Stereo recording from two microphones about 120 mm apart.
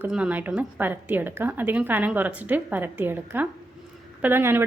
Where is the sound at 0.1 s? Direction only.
10° right (ahead or behind).